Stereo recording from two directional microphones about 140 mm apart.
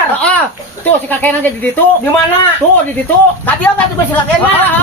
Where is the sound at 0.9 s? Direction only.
10° left (ahead or behind).